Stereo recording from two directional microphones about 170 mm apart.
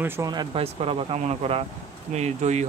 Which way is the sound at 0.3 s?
25° right (ahead or behind).